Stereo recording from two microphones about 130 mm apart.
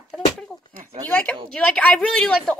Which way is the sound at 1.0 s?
15° left (ahead or behind).